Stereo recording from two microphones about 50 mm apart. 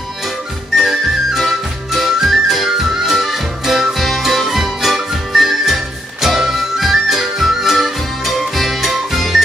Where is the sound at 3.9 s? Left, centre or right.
Centre.